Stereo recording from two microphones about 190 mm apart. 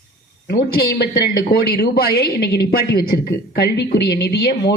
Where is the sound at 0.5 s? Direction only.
50° left (ahead or behind).